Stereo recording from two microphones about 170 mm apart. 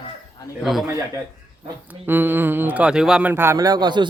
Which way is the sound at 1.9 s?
10° right (ahead or behind).